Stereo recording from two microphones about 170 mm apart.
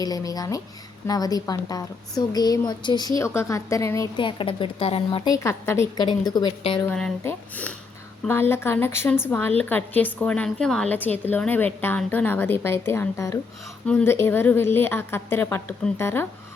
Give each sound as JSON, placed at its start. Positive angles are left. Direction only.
{"t": 0.0, "sound": "a woman's voice", "side_deg": 20}
{"t": 4.3, "sound": "speech", "side_deg": 30}
{"t": 5.3, "sound": "a woman's voice", "side_deg": 15}
{"t": 6.8, "sound": "a woman's voice", "side_deg": 10}